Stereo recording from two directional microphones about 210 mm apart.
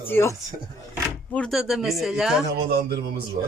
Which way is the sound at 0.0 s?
10° left (ahead or behind).